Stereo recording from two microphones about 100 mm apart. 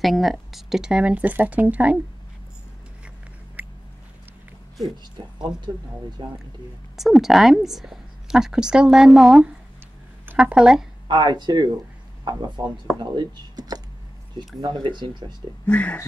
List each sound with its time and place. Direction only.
0.0 s speech: centre (ahead or behind)
3.6 s a sound: 15° right (ahead or behind)
5.2 s speech: 50° right (ahead or behind)
7.0 s a woman's voice: centre (ahead or behind)
11.1 s speech: 45° right (ahead or behind)
15.6 s speech: 15° left (ahead or behind)